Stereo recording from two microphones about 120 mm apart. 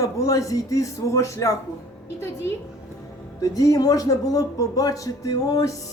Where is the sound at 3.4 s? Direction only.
30° left (ahead or behind).